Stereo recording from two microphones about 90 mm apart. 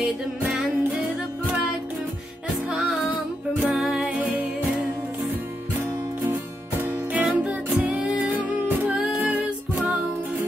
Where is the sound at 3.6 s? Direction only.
5° right (ahead or behind).